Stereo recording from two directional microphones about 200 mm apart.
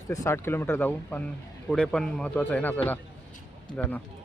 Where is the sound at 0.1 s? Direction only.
15° left (ahead or behind).